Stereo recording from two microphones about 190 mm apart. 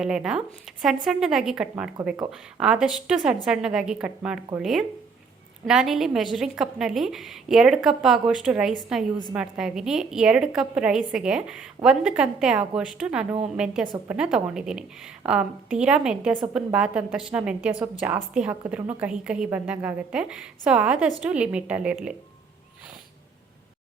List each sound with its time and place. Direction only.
0.0 s a woman's voice: 5° right (ahead or behind)